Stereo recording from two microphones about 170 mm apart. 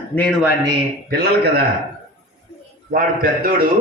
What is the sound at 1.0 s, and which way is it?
Speech, 70° right (ahead or behind).